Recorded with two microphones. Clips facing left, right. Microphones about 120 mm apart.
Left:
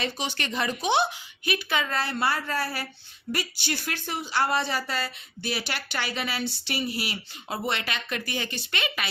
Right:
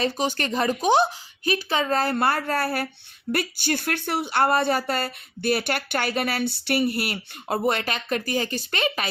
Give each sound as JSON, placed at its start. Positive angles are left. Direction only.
{"t": 0.0, "sound": "a woman's voice", "side_deg": -40}